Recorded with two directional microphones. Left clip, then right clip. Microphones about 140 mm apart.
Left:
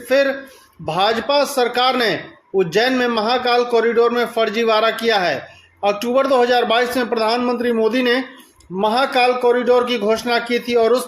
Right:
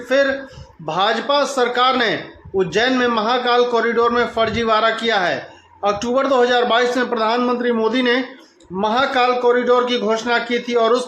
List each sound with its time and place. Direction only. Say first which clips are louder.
0.1 s a man's voice: even; 35° left (ahead or behind)